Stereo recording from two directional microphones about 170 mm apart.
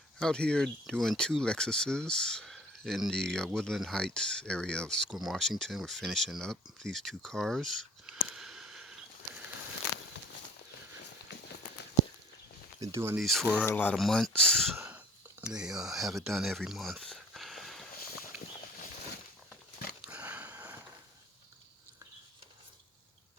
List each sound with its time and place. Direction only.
0.2 s speech: 5° left (ahead or behind)
12.8 s speech: 15° right (ahead or behind)
13.1 s speech: centre (ahead or behind)
14.8 s a sound: 10° right (ahead or behind)
20.1 s sniff: 10° right (ahead or behind)